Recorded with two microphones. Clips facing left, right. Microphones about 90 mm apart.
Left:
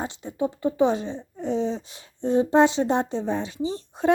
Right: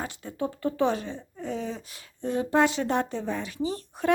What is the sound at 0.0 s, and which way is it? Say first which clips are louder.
Speech: left 4 dB; 20° left (ahead or behind).